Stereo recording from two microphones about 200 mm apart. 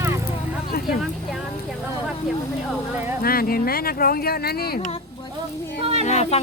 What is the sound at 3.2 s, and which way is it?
Speech, 45° left (ahead or behind).